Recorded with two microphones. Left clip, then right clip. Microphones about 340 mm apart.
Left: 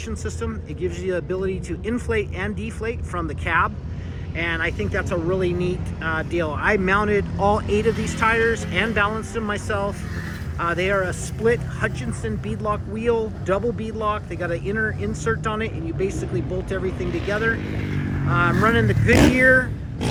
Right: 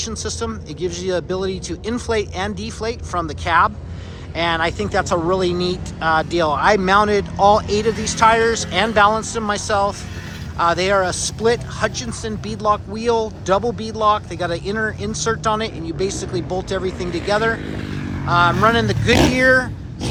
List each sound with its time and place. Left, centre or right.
0.0 s speech: centre
7.9 s speech: right
8.2 s speech: centre
17.7 s vehicle: right
18.3 s speech: centre